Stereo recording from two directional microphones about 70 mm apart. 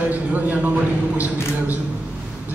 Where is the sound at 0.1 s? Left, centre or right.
Right.